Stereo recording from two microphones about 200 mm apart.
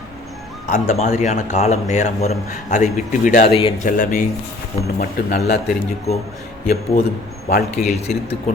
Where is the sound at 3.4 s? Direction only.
25° left (ahead or behind).